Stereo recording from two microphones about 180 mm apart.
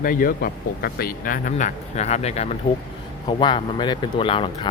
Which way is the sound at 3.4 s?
25° left (ahead or behind).